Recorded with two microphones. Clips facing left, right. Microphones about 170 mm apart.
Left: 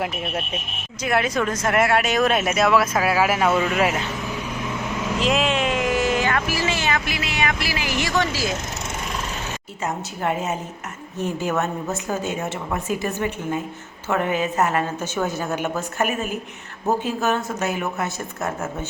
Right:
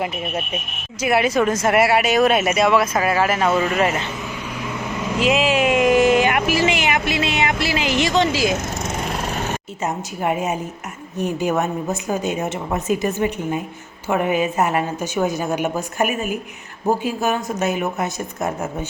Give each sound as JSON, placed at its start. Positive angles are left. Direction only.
{"t": 0.0, "sound": "speech", "side_deg": 0}
{"t": 5.2, "sound": "a sound", "side_deg": 0}
{"t": 9.8, "sound": "speech", "side_deg": -15}